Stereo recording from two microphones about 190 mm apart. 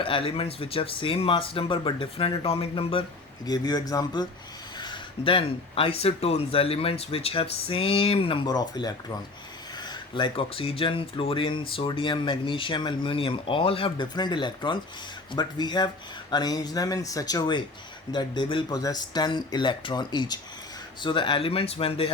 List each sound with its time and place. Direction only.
0.0 s speech: 30° left (ahead or behind)